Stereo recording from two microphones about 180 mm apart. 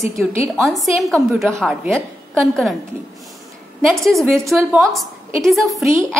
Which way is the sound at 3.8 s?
Centre (ahead or behind).